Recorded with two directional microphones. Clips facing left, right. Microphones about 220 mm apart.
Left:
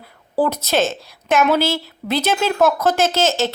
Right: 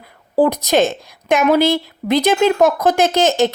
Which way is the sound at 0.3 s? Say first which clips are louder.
Right 4 dB; 15° right (ahead or behind).